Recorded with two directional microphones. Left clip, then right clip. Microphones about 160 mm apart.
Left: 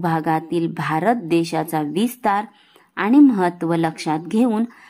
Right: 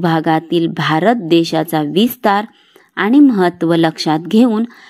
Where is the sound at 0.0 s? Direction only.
20° right (ahead or behind).